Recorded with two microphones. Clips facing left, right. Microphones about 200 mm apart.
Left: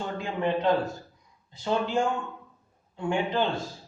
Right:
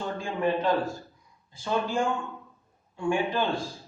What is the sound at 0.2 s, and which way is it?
A man's voice, 20° left (ahead or behind).